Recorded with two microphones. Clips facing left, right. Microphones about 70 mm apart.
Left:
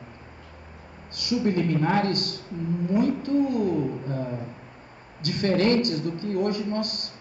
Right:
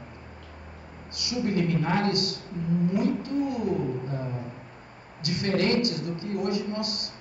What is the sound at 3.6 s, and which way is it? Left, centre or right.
Speech, right.